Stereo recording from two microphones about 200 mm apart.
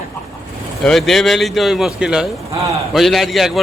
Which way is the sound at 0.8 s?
Centre (ahead or behind).